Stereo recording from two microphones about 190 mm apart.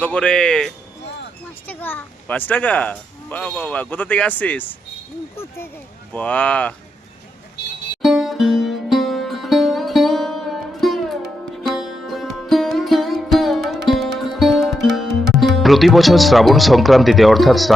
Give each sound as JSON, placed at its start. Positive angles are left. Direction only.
{"t": 0.0, "sound": "speech", "side_deg": 5}
{"t": 6.1, "sound": "speech", "side_deg": 5}
{"t": 8.0, "sound": "music", "side_deg": 0}
{"t": 14.8, "sound": "speech", "side_deg": 0}